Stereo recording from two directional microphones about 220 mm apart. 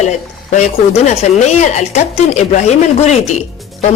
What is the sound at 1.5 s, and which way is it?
Speech, 30° left (ahead or behind).